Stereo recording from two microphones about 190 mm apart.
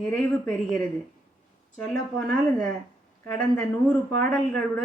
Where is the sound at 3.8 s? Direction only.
5° left (ahead or behind).